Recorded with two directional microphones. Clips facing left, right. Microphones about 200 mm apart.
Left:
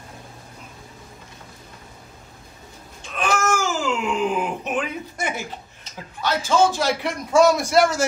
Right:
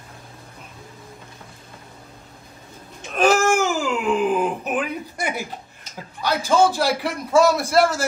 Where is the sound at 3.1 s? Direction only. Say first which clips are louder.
Right 5 dB; 35° right (ahead or behind).